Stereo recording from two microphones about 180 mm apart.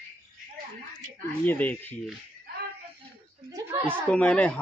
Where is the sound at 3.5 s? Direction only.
15° right (ahead or behind).